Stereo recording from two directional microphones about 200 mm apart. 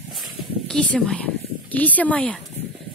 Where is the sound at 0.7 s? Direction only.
5° left (ahead or behind).